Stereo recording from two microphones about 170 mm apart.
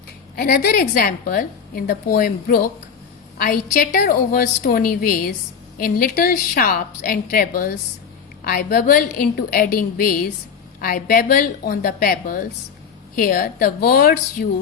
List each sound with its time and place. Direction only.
0.3 s a woman's voice: 65° left (ahead or behind)